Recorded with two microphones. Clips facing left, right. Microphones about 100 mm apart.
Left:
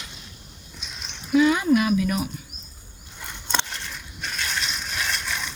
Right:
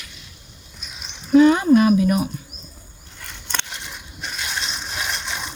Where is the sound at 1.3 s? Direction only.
35° right (ahead or behind).